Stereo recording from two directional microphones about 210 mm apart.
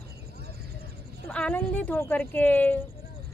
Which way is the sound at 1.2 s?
5° left (ahead or behind).